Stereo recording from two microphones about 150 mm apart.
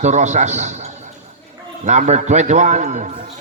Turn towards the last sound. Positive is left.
turn(degrees=-55)  # may be behind; listen again after turning